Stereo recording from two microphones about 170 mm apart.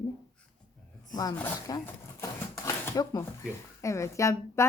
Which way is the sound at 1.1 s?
25° left (ahead or behind).